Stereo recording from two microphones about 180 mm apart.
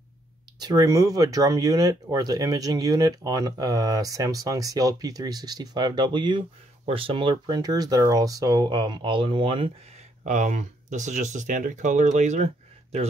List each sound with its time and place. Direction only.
0.6 s speech: 20° right (ahead or behind)
10.2 s speech: 40° right (ahead or behind)